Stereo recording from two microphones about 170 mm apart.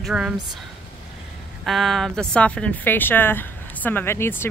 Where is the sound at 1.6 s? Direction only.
Centre (ahead or behind).